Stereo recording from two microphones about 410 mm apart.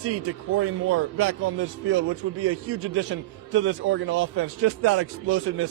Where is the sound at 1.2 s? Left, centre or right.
Right.